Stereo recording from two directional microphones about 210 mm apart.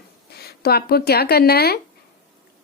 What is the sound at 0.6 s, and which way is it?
Speech, 45° left (ahead or behind).